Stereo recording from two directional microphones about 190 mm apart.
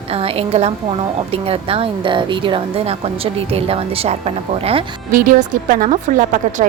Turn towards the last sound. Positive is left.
turn(degrees=-40)  # may be behind; listen again after turning